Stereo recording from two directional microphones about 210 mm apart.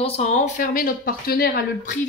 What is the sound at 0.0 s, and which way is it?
A woman's voice, 30° left (ahead or behind).